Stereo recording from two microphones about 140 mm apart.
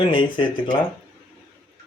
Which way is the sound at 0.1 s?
35° left (ahead or behind).